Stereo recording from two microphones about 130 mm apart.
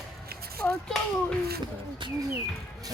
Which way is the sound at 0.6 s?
5° left (ahead or behind).